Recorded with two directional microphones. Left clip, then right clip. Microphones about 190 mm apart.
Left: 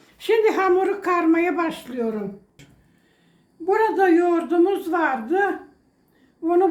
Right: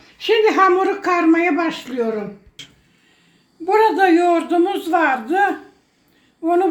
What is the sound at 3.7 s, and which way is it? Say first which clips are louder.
A woman's voice: right 4 dB; 25° right (ahead or behind).